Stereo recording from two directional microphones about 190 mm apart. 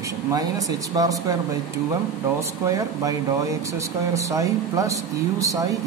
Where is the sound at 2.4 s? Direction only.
15° right (ahead or behind).